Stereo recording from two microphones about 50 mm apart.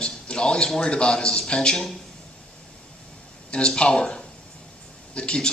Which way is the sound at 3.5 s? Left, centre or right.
Centre.